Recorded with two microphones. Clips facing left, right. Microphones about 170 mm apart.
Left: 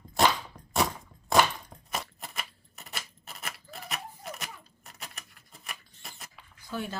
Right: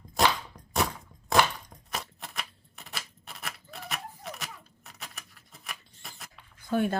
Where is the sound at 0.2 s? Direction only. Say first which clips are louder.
Left 1 dB; centre (ahead or behind).